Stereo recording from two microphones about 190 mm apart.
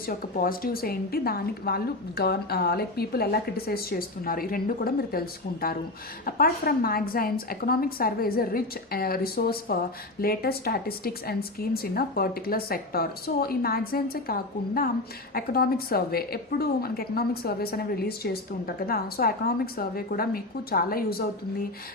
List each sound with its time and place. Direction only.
0.3 s a woman's voice: 50° left (ahead or behind)